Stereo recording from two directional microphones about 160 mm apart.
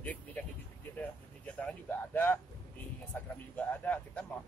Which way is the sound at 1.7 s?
10° left (ahead or behind).